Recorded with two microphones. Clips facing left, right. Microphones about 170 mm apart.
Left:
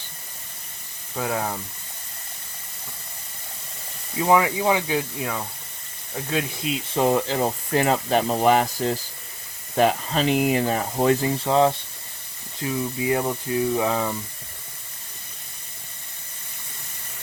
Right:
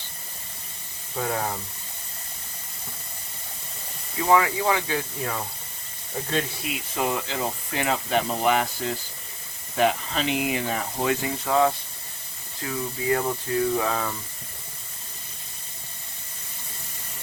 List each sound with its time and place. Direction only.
1.1 s speech: 5° left (ahead or behind)
4.2 s speech: 20° left (ahead or behind)
5.2 s speech: 5° left (ahead or behind)
6.6 s speech: 25° left (ahead or behind)
7.0 s speech: 40° left (ahead or behind); by 14.2 s 20° left (ahead or behind)